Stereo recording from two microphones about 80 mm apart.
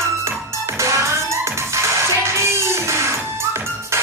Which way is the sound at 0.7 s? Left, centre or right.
Right.